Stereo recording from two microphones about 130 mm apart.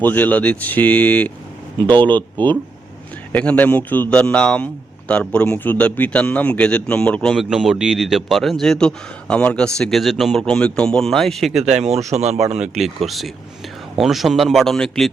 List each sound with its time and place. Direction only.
0.0 s a man's voice: 15° left (ahead or behind)
1.8 s speech: 35° right (ahead or behind)
3.3 s a man's voice: 10° left (ahead or behind)
7.3 s a man's voice: centre (ahead or behind)
11.7 s speech: 60° right (ahead or behind)
12.7 s a man's voice: centre (ahead or behind)